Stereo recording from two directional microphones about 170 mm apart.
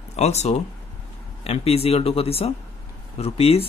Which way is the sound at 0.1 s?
40° left (ahead or behind).